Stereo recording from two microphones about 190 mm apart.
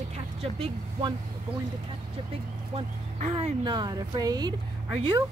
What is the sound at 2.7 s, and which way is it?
Speech, 35° right (ahead or behind).